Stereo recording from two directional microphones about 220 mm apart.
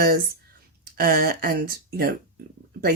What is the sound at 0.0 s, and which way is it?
Speech, 45° right (ahead or behind).